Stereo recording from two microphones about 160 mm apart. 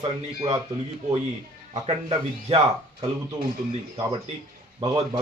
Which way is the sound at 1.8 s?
35° right (ahead or behind).